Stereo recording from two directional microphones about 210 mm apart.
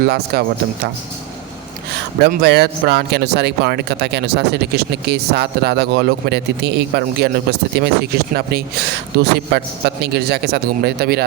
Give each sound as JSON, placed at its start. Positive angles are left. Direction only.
{"t": 0.0, "sound": "speech", "side_deg": -50}
{"t": 2.2, "sound": "speech", "side_deg": -50}